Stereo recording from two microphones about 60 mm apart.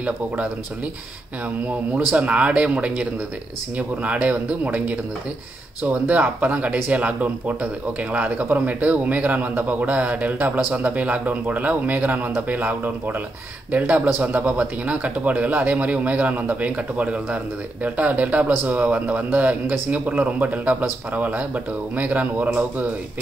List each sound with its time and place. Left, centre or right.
2.1 s a man's voice: right